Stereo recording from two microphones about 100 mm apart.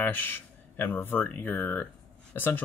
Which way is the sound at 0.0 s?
20° left (ahead or behind).